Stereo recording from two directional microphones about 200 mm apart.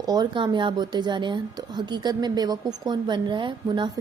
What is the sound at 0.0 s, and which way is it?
A woman's voice, 20° right (ahead or behind).